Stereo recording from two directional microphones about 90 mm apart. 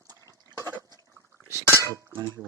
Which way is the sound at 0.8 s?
45° right (ahead or behind).